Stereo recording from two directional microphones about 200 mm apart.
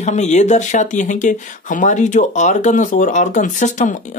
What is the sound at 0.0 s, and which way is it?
Speech, 35° left (ahead or behind).